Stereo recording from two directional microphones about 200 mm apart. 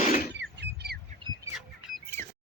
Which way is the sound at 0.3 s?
55° right (ahead or behind).